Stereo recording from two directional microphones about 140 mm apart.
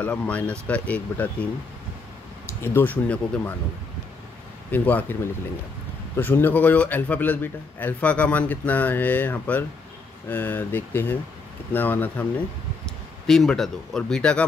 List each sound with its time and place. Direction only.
0.0 s a man's voice: 10° left (ahead or behind)
2.6 s a man's voice: 15° left (ahead or behind)
4.6 s a man's voice: 10° left (ahead or behind)
13.3 s speech: centre (ahead or behind)